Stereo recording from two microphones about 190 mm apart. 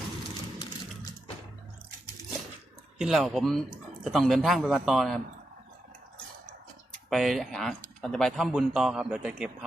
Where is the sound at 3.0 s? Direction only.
Centre (ahead or behind).